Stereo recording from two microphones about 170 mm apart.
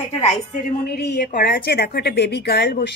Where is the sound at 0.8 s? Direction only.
70° left (ahead or behind).